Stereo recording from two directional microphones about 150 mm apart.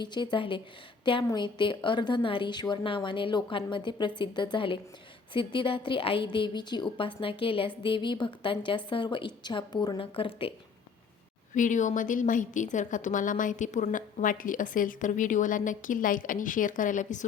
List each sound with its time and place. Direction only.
0.0 s a woman's voice: 30° left (ahead or behind)
11.5 s a woman's voice: 55° left (ahead or behind)